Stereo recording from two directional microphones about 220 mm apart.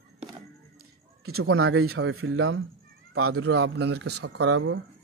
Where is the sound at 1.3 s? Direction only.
70° right (ahead or behind).